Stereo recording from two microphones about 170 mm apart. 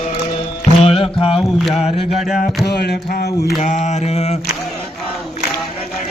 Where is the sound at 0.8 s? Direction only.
35° left (ahead or behind).